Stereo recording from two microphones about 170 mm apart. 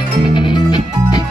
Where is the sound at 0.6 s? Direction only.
25° left (ahead or behind).